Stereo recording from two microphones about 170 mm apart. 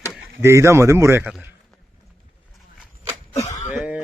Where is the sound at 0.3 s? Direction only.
15° right (ahead or behind).